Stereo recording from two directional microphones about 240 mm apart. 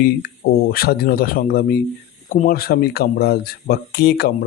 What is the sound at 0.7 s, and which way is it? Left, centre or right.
Speech, left.